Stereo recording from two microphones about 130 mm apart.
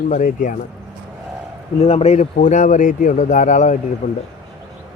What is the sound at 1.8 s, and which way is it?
Speech, 55° left (ahead or behind).